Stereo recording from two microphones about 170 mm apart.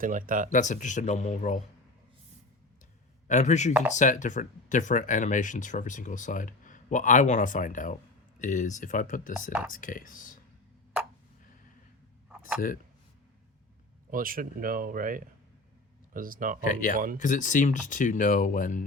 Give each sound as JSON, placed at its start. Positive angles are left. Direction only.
{"t": 0.0, "sound": "speech", "side_deg": -50}
{"t": 0.5, "sound": "speech", "side_deg": 45}
{"t": 3.2, "sound": "speech", "side_deg": 45}
{"t": 14.1, "sound": "speech", "side_deg": -55}
{"t": 16.6, "sound": "speech", "side_deg": 50}